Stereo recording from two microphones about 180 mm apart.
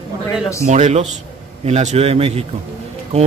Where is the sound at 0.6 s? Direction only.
40° right (ahead or behind).